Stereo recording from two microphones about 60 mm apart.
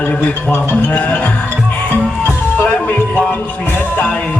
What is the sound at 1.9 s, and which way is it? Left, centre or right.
Music, left.